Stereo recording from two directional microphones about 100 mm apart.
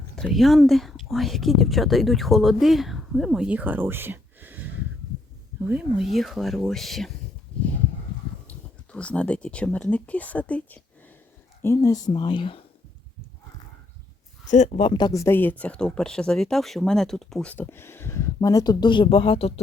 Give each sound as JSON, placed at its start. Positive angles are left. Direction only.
{"t": 0.3, "sound": "speech", "side_deg": 0}
{"t": 6.0, "sound": "speech", "side_deg": 0}
{"t": 8.4, "sound": "speech", "side_deg": 10}
{"t": 11.6, "sound": "speech", "side_deg": 30}
{"t": 12.1, "sound": "speech", "side_deg": 50}
{"t": 14.7, "sound": "speech", "side_deg": 75}
{"t": 15.1, "sound": "speech", "side_deg": 25}
{"t": 17.5, "sound": "speech", "side_deg": 20}